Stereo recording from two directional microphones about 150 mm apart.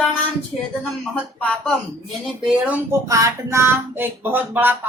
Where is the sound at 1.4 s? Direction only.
10° left (ahead or behind).